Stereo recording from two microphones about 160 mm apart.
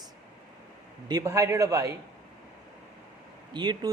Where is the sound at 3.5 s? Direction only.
25° right (ahead or behind).